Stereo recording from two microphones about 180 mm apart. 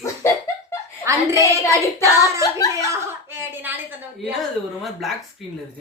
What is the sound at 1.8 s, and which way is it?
Singing, 15° left (ahead or behind).